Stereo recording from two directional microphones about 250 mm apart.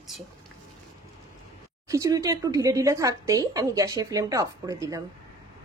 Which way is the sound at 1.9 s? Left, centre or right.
Centre.